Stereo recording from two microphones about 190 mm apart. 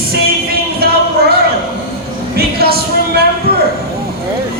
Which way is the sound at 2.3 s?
55° right (ahead or behind).